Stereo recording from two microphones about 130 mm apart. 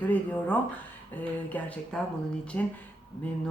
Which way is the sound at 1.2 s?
10° left (ahead or behind).